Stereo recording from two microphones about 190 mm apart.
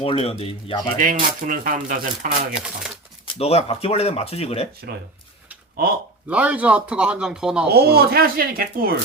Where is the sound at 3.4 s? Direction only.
30° left (ahead or behind).